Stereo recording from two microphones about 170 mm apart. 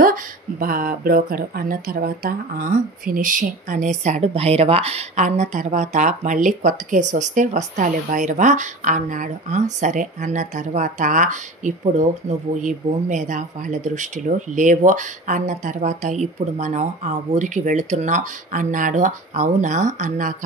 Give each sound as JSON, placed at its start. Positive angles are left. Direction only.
{"t": 0.0, "sound": "speech", "side_deg": -55}